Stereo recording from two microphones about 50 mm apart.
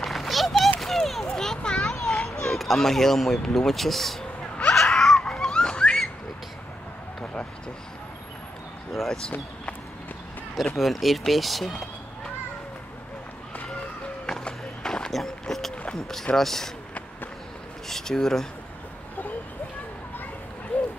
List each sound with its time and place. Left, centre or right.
0.0 s a sound: centre
2.4 s speech: centre
4.7 s a sound: centre
8.9 s speech: centre
10.5 s speech: centre
14.4 s a sound: centre
15.4 s rowboat: centre
16.3 s speech: centre
17.8 s speech: centre
20.7 s run: left